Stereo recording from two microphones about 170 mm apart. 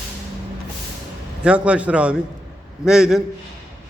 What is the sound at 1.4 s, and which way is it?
A man's voice, 5° right (ahead or behind).